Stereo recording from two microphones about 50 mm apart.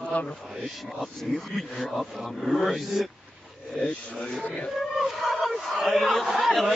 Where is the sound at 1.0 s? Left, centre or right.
Centre.